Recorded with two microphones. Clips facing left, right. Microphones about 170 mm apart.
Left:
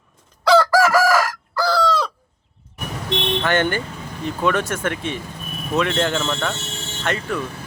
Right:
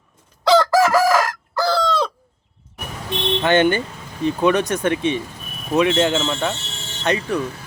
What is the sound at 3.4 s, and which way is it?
A man's voice, 20° right (ahead or behind).